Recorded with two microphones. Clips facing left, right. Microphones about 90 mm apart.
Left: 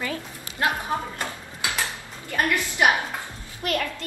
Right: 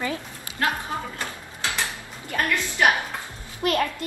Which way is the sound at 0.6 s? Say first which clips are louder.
Left 1 dB; 20° left (ahead or behind).